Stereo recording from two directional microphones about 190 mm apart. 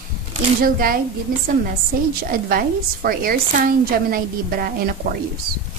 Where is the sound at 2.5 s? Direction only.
50° right (ahead or behind).